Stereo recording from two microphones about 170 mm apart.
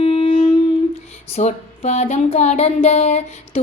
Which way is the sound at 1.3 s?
40° left (ahead or behind).